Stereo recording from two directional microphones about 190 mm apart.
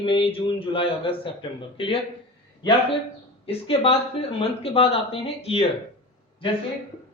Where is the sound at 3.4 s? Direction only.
30° left (ahead or behind).